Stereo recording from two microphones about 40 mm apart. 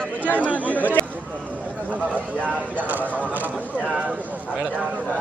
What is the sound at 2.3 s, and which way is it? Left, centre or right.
Speech, left.